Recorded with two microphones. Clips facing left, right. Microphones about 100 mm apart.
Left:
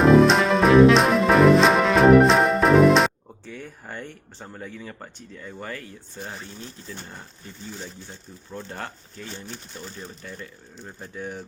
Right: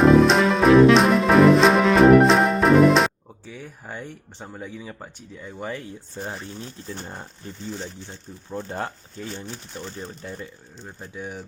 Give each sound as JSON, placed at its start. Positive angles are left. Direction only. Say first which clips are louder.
{"t": 0.0, "sound": "music", "louder": "right 1 dB", "side_deg": 0}
{"t": 3.4, "sound": "speech", "louder": "even", "side_deg": -5}
{"t": 8.4, "sound": "speech", "louder": "right 5 dB", "side_deg": -25}
{"t": 10.8, "sound": "speech", "louder": "even", "side_deg": -10}